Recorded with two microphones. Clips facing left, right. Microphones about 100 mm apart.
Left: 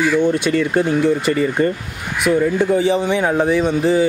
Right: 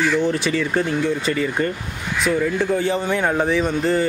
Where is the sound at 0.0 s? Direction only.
5° left (ahead or behind).